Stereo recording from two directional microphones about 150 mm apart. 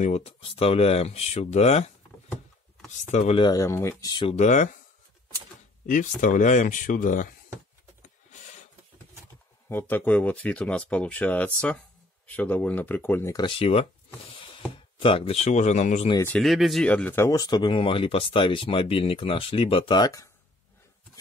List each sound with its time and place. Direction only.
0.0 s speech: 45° left (ahead or behind)
3.0 s speech: 50° left (ahead or behind)
3.3 s speech: 25° left (ahead or behind)
4.0 s speech: 30° left (ahead or behind)
4.4 s speech: 55° left (ahead or behind)
5.9 s speech: 60° left (ahead or behind)
9.7 s speech: 15° left (ahead or behind)
13.4 s speech: 35° left (ahead or behind)
14.3 s a sound: 35° left (ahead or behind)
15.0 s speech: 35° left (ahead or behind)
16.3 s speech: centre (ahead or behind); by 20.2 s 25° left (ahead or behind)